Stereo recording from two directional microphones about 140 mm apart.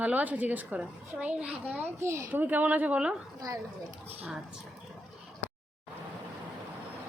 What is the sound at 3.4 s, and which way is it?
Speech, 25° right (ahead or behind).